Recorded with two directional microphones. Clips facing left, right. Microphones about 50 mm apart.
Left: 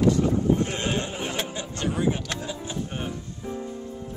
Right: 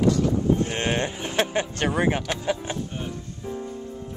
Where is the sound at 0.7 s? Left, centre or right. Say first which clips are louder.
Right 2 dB; right.